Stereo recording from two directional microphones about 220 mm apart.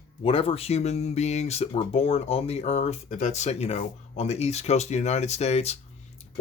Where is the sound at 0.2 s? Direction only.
25° left (ahead or behind).